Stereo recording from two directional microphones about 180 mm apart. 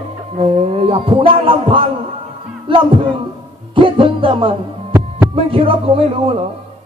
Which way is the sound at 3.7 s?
30° right (ahead or behind).